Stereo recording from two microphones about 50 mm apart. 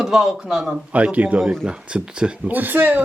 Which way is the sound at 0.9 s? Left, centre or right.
Right.